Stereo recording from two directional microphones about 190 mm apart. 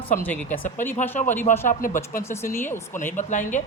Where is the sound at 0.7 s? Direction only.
10° left (ahead or behind).